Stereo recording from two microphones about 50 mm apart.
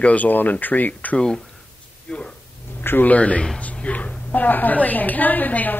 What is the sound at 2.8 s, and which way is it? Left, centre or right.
Speech, left.